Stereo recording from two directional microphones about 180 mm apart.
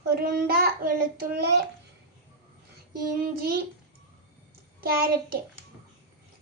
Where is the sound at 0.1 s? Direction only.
55° right (ahead or behind).